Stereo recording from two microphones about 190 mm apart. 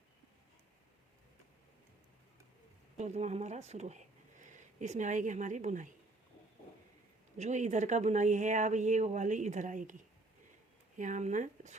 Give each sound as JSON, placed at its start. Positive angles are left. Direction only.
{"t": 3.0, "sound": "speech", "side_deg": -35}
{"t": 7.3, "sound": "speech", "side_deg": -40}
{"t": 10.9, "sound": "speech", "side_deg": -40}